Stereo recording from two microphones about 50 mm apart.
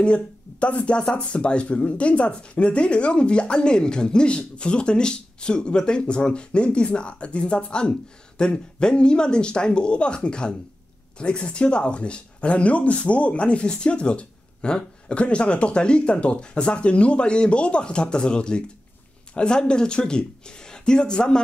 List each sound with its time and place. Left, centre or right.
0.0 s speech: left